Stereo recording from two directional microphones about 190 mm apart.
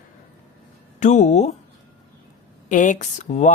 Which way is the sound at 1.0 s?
40° left (ahead or behind).